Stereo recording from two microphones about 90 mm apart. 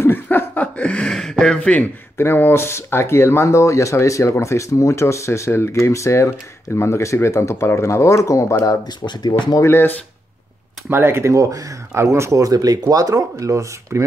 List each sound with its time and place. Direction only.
0.0 s a sound: 25° left (ahead or behind)
2.2 s speech: 25° left (ahead or behind)
8.8 s speech: 55° left (ahead or behind)
9.7 s speech: 25° left (ahead or behind)
10.9 s speech: 25° right (ahead or behind)